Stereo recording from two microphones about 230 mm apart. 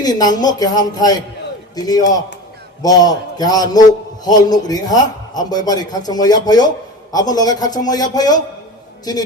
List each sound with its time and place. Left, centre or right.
0.0 s a man's voice: centre